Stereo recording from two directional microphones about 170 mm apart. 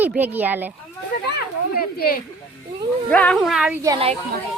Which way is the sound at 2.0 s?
60° left (ahead or behind).